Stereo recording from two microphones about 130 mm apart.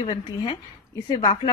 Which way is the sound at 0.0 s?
35° left (ahead or behind).